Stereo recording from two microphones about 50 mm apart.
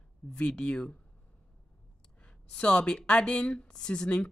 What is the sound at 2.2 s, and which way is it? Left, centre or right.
Speech, centre.